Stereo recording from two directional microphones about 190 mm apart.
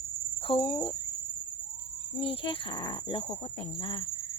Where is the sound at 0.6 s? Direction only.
20° left (ahead or behind).